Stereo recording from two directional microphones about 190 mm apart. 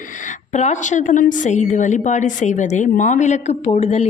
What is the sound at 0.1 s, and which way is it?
A woman's voice, 40° left (ahead or behind).